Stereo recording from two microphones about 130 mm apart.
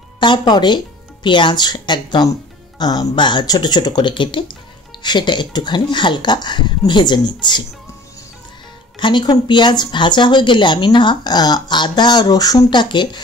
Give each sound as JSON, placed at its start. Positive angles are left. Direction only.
{"t": 0.2, "sound": "speech", "side_deg": 35}
{"t": 9.0, "sound": "speech", "side_deg": 35}